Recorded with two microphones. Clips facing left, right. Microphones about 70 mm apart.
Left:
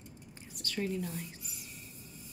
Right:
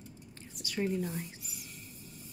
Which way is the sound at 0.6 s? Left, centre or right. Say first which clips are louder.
Right 2 dB; centre.